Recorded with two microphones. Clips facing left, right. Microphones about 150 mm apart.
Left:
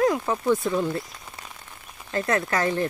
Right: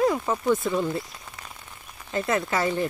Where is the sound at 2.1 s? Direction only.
5° right (ahead or behind).